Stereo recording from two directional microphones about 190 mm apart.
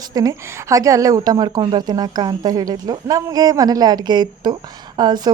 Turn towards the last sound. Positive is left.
turn(degrees=-20)  # may be behind; listen again after turning